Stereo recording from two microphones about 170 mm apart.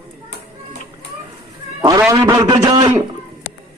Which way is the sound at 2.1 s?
20° right (ahead or behind).